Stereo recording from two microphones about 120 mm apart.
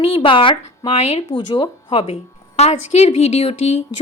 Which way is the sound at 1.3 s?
50° left (ahead or behind).